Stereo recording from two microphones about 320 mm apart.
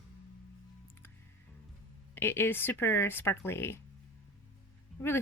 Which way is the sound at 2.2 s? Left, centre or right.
Centre.